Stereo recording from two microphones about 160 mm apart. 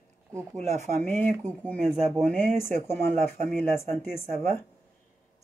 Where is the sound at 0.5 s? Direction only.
45° right (ahead or behind).